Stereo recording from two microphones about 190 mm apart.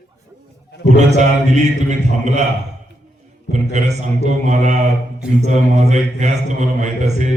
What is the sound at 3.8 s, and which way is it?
Mantra, 35° right (ahead or behind).